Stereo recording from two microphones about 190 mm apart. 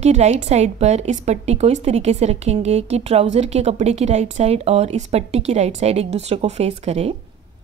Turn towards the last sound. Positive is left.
turn(degrees=-35)  # may be behind; listen again after turning